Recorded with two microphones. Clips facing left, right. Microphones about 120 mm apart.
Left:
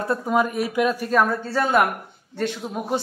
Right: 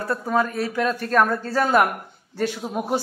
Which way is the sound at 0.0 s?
20° left (ahead or behind).